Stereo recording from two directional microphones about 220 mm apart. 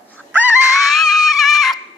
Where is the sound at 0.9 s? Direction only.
Centre (ahead or behind).